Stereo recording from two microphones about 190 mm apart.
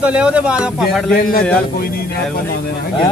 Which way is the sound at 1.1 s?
50° left (ahead or behind).